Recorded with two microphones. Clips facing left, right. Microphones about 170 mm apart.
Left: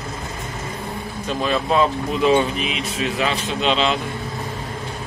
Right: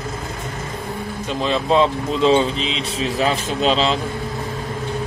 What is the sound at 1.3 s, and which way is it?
Speech, 25° right (ahead or behind).